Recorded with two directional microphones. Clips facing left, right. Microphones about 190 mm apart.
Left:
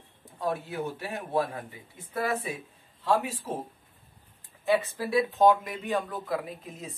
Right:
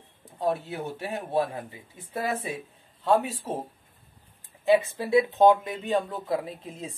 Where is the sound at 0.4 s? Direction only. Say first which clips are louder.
Right 3 dB; 20° right (ahead or behind).